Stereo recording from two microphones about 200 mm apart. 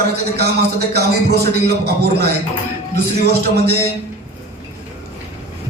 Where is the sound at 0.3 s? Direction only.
50° right (ahead or behind).